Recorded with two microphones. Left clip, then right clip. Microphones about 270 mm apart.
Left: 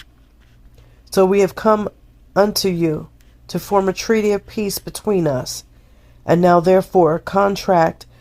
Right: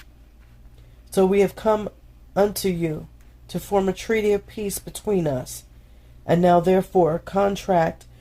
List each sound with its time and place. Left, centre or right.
1.1 s speech: left